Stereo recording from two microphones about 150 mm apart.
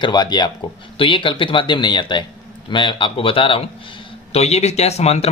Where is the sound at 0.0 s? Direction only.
30° left (ahead or behind).